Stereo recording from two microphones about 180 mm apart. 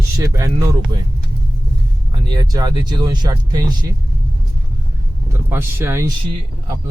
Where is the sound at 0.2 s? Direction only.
20° right (ahead or behind).